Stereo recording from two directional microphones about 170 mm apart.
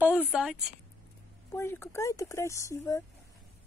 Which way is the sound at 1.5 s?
15° left (ahead or behind).